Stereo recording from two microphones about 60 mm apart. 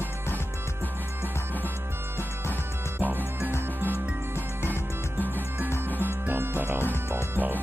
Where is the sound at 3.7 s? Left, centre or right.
Right.